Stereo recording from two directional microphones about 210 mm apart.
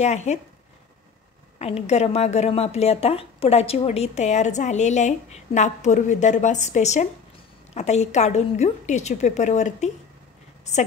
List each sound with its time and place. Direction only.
0.0 s a woman's voice: 30° left (ahead or behind)
1.6 s a woman's voice: 30° left (ahead or behind)